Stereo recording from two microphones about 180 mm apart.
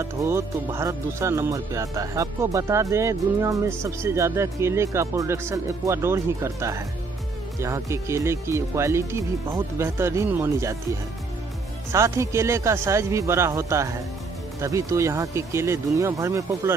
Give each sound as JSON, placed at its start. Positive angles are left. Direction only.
{"t": 0.2, "sound": "speech", "side_deg": -15}